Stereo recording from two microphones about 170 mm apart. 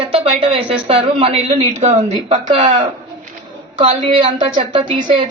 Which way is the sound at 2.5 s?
25° right (ahead or behind).